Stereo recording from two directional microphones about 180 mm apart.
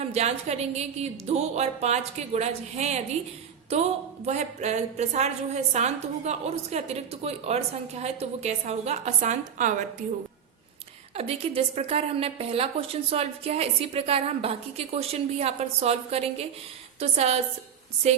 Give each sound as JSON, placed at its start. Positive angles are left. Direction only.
{"t": 0.1, "sound": "a woman's voice", "side_deg": -35}
{"t": 4.3, "sound": "a woman's voice", "side_deg": -40}
{"t": 11.1, "sound": "a woman's voice", "side_deg": -35}